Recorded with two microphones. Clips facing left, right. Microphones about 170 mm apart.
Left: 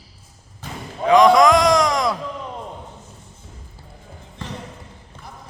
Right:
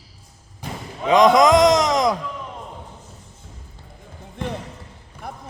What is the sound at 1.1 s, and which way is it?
A man's voice, 20° right (ahead or behind).